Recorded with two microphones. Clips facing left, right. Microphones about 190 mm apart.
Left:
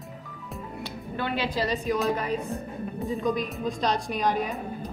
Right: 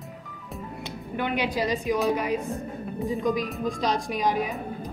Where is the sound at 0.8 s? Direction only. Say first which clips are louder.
Right 2 dB; 15° right (ahead or behind).